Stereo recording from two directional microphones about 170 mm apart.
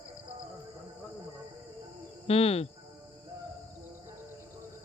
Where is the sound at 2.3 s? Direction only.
35° left (ahead or behind).